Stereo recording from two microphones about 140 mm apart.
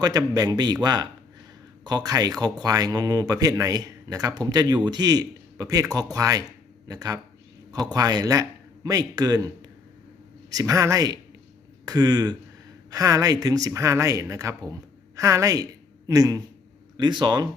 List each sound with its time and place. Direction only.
0.0 s a man's voice: 25° right (ahead or behind)